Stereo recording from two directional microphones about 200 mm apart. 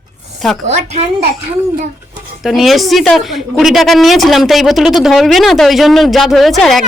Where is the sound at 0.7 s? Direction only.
35° right (ahead or behind).